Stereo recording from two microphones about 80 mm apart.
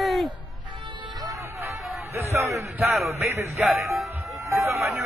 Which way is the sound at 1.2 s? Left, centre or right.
Right.